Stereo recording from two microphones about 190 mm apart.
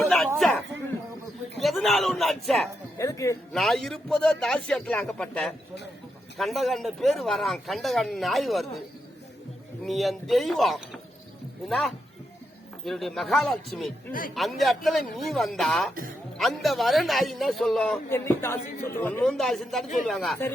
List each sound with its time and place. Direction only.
0.3 s a sound: centre (ahead or behind)
1.6 s a sound: centre (ahead or behind)
3.0 s speech: 15° left (ahead or behind)
3.5 s speech: centre (ahead or behind)
9.8 s speech: centre (ahead or behind)
14.1 s a man's voice: 45° left (ahead or behind)
14.3 s speech: centre (ahead or behind)